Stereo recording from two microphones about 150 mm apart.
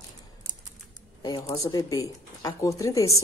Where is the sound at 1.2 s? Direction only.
25° left (ahead or behind).